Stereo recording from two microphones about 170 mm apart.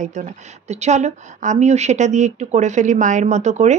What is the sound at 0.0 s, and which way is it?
A woman's voice, 45° right (ahead or behind).